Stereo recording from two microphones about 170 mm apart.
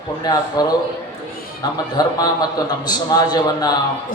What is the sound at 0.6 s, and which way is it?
Speech, 20° left (ahead or behind).